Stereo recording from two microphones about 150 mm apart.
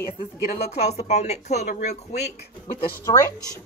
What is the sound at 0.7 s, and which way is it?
A woman's voice, 45° left (ahead or behind).